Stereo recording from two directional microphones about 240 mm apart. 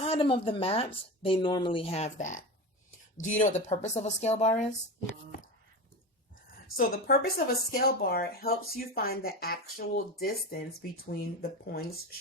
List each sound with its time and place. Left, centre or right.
0.0 s speech: left
6.7 s speech: left